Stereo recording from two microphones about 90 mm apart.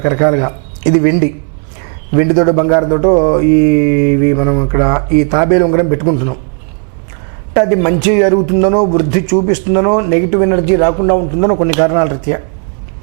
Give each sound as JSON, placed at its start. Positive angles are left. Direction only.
{"t": 0.0, "sound": "speech", "side_deg": -20}
{"t": 7.5, "sound": "speech", "side_deg": -15}